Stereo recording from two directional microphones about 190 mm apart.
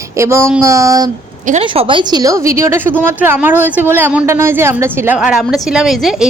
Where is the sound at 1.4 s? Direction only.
40° right (ahead or behind).